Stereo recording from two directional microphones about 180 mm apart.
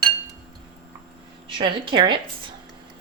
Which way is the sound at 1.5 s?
25° right (ahead or behind).